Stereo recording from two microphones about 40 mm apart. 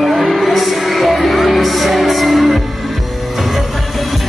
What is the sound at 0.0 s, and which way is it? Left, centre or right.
Music, centre.